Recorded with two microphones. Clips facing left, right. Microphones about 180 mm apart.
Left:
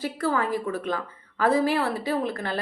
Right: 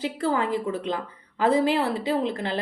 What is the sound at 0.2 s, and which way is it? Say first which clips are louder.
A woman's voice: right 1 dB; 25° right (ahead or behind).